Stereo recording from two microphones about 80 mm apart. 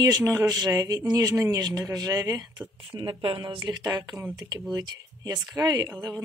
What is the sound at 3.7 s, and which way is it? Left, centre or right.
Speech, right.